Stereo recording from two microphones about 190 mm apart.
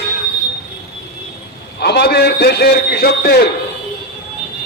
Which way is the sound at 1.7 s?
60° left (ahead or behind).